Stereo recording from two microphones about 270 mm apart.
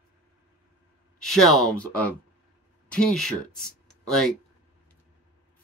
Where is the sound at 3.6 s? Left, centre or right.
Centre.